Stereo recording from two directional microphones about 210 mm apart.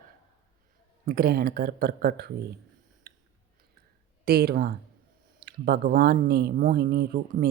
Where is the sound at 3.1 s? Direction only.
45° right (ahead or behind).